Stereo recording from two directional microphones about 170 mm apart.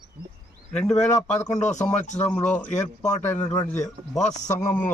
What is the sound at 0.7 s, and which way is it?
Speech, 5° left (ahead or behind).